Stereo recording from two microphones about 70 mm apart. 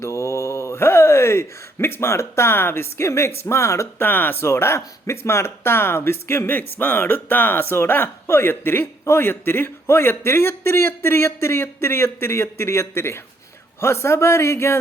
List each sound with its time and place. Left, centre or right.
0.0 s speech: left
3.9 s speech: left